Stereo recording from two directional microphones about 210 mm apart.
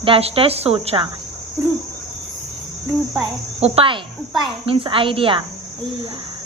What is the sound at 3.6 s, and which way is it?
Speech, 25° right (ahead or behind).